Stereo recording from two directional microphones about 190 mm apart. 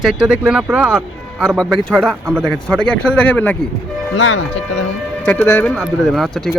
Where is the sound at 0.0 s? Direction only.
5° right (ahead or behind).